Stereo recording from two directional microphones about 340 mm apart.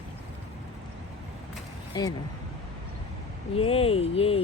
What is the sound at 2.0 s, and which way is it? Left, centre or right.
Speech, centre.